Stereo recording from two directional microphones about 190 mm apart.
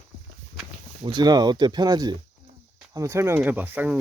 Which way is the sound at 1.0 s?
20° right (ahead or behind).